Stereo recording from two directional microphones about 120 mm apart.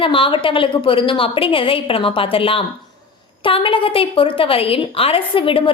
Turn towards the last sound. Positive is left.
turn(degrees=45)  # may be behind; listen again after turning